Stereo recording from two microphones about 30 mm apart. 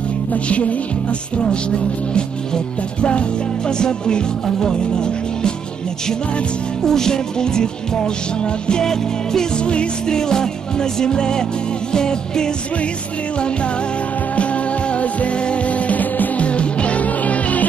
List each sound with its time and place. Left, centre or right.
0.3 s music: left
2.1 s music: left
6.8 s music: centre
9.6 s music: left
10.0 s music: left
14.3 s music: left
17.0 s music: left